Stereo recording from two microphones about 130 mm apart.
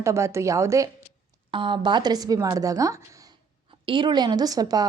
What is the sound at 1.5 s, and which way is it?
A woman's voice, 40° right (ahead or behind).